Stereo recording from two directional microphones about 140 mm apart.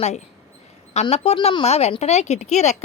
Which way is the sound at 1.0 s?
45° left (ahead or behind).